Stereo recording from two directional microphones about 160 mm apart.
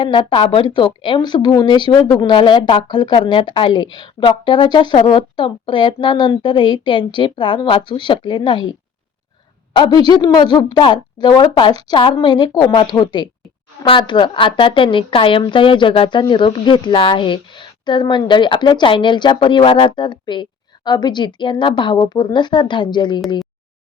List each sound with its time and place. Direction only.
0.0 s a woman's voice: 30° left (ahead or behind)
9.7 s a woman's voice: 25° left (ahead or behind)